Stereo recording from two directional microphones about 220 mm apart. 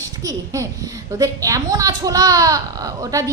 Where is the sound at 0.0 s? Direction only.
15° right (ahead or behind).